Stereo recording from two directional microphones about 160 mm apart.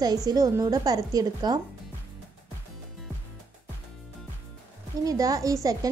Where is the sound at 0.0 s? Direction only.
25° right (ahead or behind).